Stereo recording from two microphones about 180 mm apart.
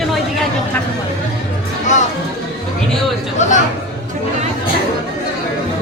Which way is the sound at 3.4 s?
40° left (ahead or behind).